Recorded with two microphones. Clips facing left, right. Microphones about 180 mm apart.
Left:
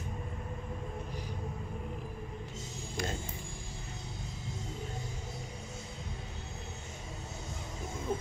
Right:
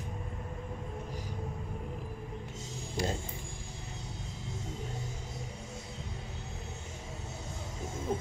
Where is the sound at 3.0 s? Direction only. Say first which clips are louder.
Right 4 dB; 35° right (ahead or behind).